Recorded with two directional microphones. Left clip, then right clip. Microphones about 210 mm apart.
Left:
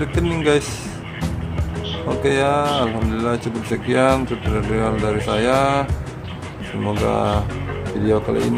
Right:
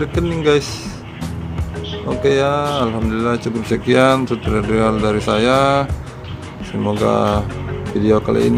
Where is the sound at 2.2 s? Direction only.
10° right (ahead or behind).